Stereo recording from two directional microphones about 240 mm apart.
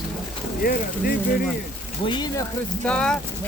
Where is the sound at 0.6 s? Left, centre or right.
Left.